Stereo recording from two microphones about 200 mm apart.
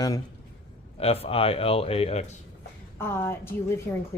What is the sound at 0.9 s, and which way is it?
Speech, 30° left (ahead or behind).